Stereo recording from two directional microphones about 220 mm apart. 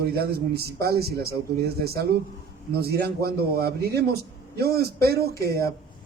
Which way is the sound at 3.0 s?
45° right (ahead or behind).